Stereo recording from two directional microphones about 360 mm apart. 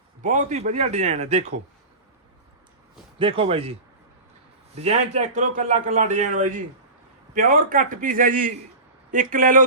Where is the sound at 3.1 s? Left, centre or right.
Centre.